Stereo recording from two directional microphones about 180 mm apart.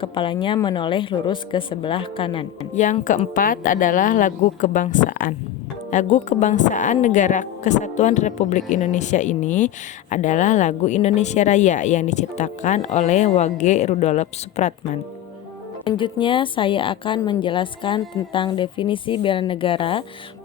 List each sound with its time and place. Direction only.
0.0 s a woman's voice: 30° left (ahead or behind)
2.7 s a woman's voice: 40° left (ahead or behind)
15.8 s a woman's voice: 25° left (ahead or behind)